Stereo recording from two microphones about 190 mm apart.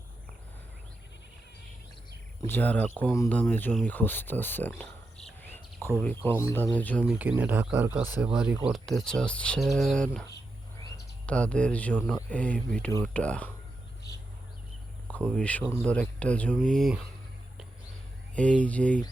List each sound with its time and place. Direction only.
2.5 s speech: 10° left (ahead or behind)
5.4 s cricket: 10° left (ahead or behind)
6.0 s speech: 10° left (ahead or behind)
7.0 s speech: 5° right (ahead or behind)
11.3 s speech: 5° left (ahead or behind)
15.0 s speech: 5° left (ahead or behind)
18.3 s speech: 5° left (ahead or behind)